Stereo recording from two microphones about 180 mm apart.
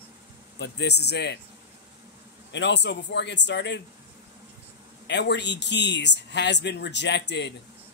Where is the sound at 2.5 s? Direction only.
75° left (ahead or behind).